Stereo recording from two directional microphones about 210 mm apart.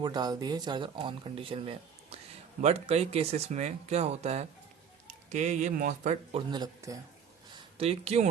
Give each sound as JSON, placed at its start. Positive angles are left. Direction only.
{"t": 0.0, "sound": "speech", "side_deg": -20}
{"t": 6.5, "sound": "a man's voice", "side_deg": -15}
{"t": 7.5, "sound": "a sound", "side_deg": -30}